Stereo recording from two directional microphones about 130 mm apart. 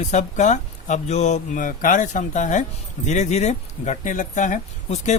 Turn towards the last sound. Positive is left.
turn(degrees=70)  # may be behind; listen again after turning